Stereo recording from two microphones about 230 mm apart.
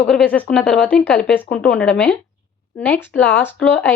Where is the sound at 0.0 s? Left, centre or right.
Centre.